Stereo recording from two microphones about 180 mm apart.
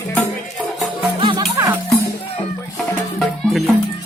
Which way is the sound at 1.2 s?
25° right (ahead or behind).